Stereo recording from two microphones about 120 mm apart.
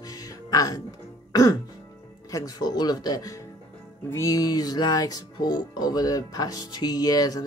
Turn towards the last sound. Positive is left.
turn(degrees=35)  # may be behind; listen again after turning